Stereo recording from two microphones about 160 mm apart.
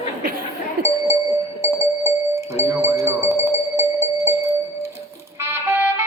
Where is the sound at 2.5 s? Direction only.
15° right (ahead or behind).